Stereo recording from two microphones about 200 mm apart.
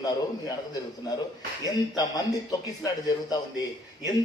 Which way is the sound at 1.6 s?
20° left (ahead or behind).